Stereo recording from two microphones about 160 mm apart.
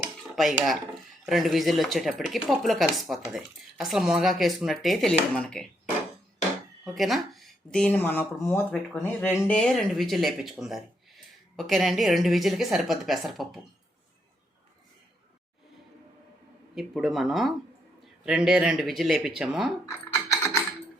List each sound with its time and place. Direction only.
0.3 s speech: centre (ahead or behind)
6.8 s speech: centre (ahead or behind)
16.7 s speech: centre (ahead or behind)
20.3 s typing: 15° left (ahead or behind)